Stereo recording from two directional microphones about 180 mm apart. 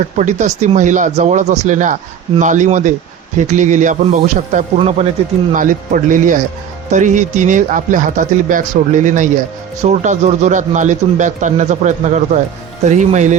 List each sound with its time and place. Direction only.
0.0 s speech: 40° right (ahead or behind)
5.5 s speech: 45° right (ahead or behind)